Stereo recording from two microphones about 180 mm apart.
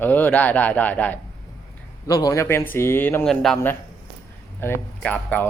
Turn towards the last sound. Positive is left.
turn(degrees=10)  # may be behind; listen again after turning